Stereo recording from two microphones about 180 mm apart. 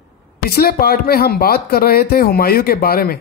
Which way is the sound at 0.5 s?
60° left (ahead or behind).